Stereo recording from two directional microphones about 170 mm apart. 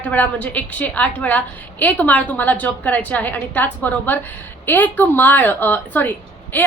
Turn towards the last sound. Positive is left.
turn(degrees=10)  # may be behind; listen again after turning